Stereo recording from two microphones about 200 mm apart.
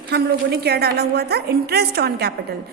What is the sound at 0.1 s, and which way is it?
A woman's voice, 55° right (ahead or behind).